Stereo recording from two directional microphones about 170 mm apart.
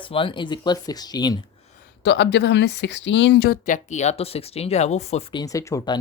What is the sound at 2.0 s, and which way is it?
Speech, 85° left.